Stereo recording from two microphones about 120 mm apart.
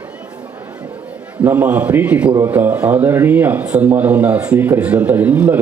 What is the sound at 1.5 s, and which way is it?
A man's voice, 15° right (ahead or behind).